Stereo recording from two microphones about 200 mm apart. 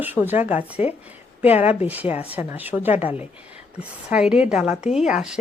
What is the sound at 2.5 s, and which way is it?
A woman's voice, 10° right (ahead or behind).